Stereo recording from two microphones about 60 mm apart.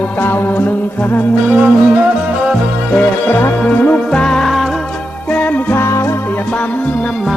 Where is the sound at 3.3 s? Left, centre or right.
Left.